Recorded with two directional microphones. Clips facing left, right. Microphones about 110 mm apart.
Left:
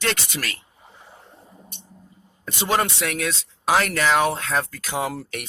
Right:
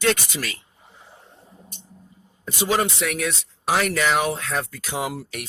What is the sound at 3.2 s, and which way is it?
Speech, 90° left.